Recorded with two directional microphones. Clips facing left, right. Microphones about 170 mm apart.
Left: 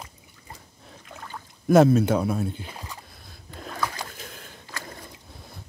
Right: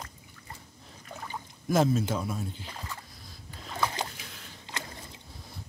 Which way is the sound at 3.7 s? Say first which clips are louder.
Even; 25° right (ahead or behind).